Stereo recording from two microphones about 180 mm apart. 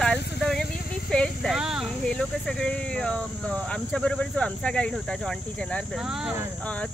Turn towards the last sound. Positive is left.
turn(degrees=5)  # may be behind; listen again after turning